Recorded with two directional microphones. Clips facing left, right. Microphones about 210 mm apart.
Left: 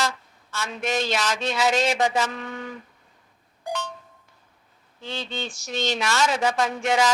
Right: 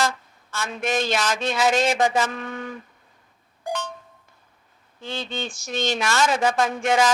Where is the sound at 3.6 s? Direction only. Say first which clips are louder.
Right 2 dB; 50° right (ahead or behind).